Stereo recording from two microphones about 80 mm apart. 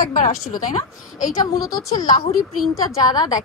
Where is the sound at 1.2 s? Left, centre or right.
Left.